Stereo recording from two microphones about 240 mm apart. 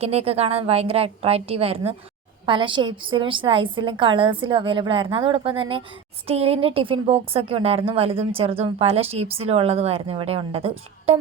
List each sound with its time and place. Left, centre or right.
0.0 s speech: right